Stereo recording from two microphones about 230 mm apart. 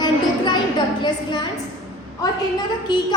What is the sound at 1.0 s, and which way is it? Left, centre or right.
Speech, centre.